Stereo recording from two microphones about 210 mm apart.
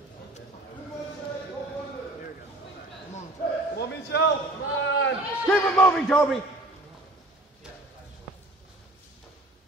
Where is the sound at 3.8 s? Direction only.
55° left (ahead or behind).